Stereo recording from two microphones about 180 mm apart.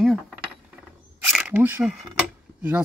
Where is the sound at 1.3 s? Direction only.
5° right (ahead or behind).